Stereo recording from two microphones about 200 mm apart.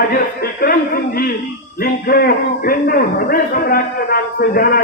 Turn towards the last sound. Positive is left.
turn(degrees=45)  # may be behind; listen again after turning